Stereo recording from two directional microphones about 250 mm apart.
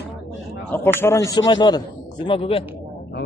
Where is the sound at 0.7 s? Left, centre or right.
Centre.